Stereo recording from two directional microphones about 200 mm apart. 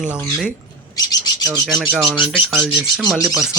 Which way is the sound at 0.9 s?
20° left (ahead or behind).